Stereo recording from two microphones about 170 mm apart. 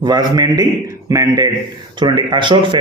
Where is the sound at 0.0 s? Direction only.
25° right (ahead or behind).